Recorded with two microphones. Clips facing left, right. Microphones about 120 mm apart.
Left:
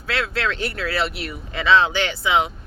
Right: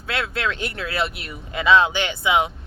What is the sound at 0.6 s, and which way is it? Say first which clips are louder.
A woman's voice: left 2 dB; 20° right (ahead or behind).